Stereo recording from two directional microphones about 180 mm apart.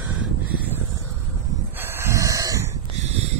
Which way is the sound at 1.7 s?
10° right (ahead or behind).